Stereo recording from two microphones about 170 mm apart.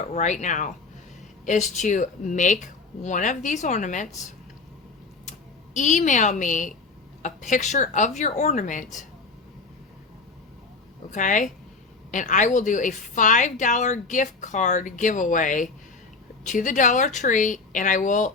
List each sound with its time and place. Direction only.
0.1 s a woman's voice: 45° left (ahead or behind)
5.7 s a woman's voice: 45° left (ahead or behind)
11.1 s a woman's voice: 50° left (ahead or behind)